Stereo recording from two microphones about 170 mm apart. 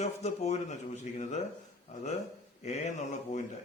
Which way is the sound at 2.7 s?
45° left (ahead or behind).